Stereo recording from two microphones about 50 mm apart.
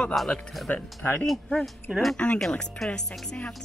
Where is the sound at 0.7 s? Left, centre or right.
Left.